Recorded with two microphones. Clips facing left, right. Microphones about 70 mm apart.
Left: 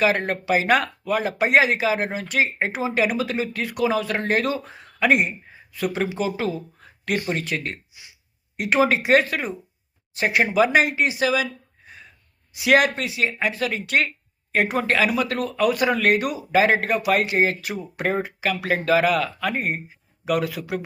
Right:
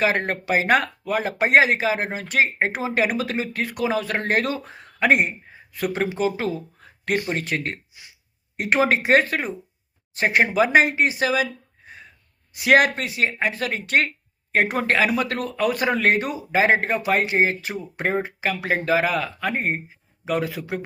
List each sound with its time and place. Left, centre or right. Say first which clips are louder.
0.0 s speech: left 1 dB; right
12.5 s speech: right 1 dB; right